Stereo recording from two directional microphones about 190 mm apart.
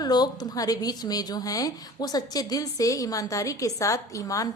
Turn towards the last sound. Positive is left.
turn(degrees=15)  # may be behind; listen again after turning